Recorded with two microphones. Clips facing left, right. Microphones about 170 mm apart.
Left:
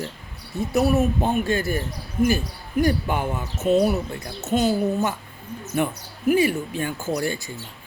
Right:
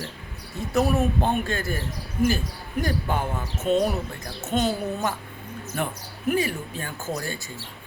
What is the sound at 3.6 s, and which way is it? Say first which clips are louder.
Speech: left 3 dB; 5° left (ahead or behind).